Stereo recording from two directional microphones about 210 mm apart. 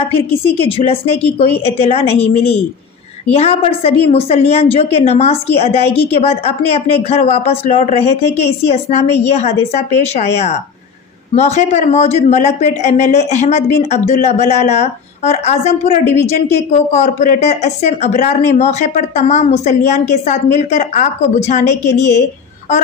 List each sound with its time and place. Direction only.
0.6 s a woman's voice: 25° left (ahead or behind)